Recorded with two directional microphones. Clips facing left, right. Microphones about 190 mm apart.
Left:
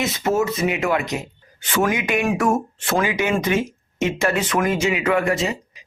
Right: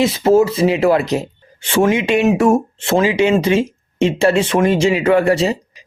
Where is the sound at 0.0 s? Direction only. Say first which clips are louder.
Right 8 dB; 30° right (ahead or behind).